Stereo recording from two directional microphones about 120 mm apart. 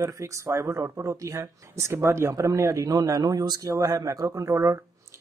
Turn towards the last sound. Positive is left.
turn(degrees=-25)  # may be behind; listen again after turning